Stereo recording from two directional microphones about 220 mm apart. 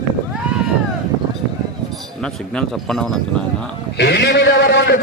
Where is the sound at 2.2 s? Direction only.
5° left (ahead or behind).